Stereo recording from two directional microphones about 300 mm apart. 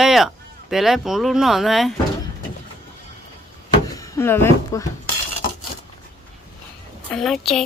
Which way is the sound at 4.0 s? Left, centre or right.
Centre.